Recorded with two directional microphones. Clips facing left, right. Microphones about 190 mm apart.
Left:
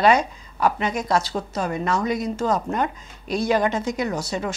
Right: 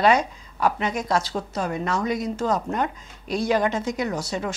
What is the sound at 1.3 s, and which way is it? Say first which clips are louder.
Speech: left 1 dB; 25° left (ahead or behind).